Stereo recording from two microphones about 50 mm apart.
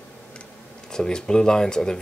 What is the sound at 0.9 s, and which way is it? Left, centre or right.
Speech, centre.